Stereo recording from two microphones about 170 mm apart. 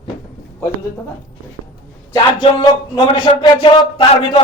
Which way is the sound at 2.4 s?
30° left (ahead or behind).